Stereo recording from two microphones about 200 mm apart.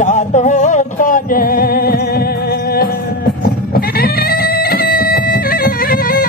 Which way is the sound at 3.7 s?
50° left (ahead or behind).